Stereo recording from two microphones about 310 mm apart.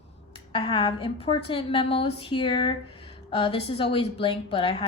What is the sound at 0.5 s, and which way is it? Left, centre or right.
A woman's voice, centre.